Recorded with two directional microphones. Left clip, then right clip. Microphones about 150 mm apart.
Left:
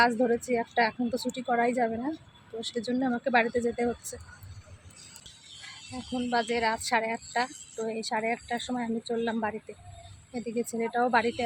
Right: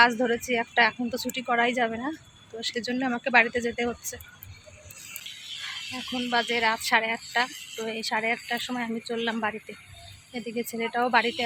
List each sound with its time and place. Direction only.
0.3 s speech: 15° left (ahead or behind)
6.1 s speech: 10° left (ahead or behind)
10.3 s speech: 10° left (ahead or behind)